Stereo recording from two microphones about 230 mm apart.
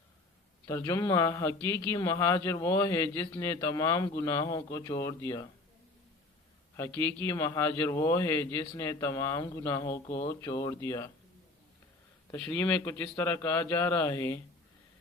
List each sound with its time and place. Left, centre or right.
0.7 s a man's voice: centre
6.7 s a man's voice: centre
12.3 s a man's voice: centre